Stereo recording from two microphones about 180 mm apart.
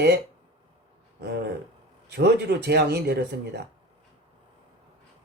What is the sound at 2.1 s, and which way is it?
Speech, 65° right (ahead or behind).